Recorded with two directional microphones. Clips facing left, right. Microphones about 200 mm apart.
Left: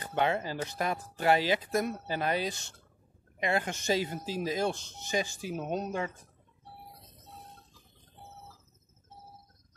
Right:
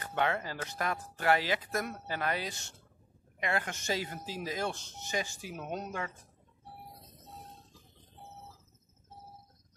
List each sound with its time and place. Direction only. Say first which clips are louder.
0.0 s speech: left 3 dB; 25° left (ahead or behind)